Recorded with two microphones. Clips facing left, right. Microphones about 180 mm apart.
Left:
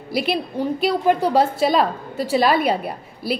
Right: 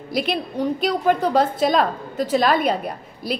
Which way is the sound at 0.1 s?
5° left (ahead or behind).